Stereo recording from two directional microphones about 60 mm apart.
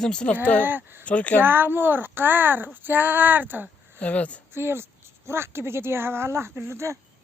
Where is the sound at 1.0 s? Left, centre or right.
Left.